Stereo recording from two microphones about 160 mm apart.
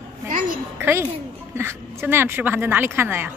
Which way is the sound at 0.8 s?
15° right (ahead or behind).